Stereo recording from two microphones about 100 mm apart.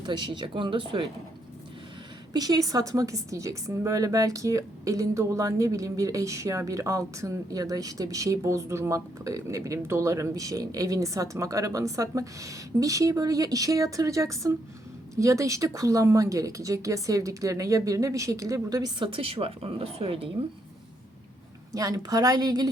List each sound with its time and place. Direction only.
0.0 s speech: 50° right (ahead or behind)
2.3 s a woman's voice: 40° right (ahead or behind)
18.9 s a woman's voice: 60° right (ahead or behind)
21.7 s a woman's voice: 35° right (ahead or behind)